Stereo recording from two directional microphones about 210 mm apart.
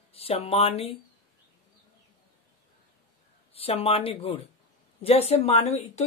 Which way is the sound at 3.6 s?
25° left (ahead or behind).